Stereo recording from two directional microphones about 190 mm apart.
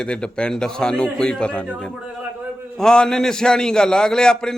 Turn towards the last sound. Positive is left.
turn(degrees=5)  # may be behind; listen again after turning